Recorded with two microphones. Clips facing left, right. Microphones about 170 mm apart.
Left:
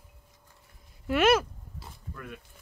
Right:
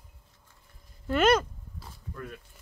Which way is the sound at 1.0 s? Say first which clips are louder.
Even; 5° left (ahead or behind).